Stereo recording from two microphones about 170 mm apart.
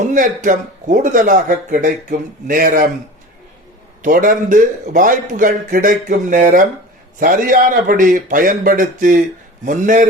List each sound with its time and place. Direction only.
0.0 s speech: 50° right (ahead or behind)
4.0 s speech: 50° right (ahead or behind)